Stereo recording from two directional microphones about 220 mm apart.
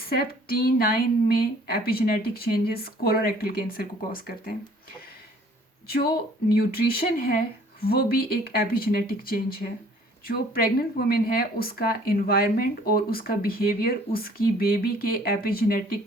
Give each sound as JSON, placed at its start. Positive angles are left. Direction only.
{"t": 0.1, "sound": "speech", "side_deg": 45}
{"t": 5.9, "sound": "speech", "side_deg": 45}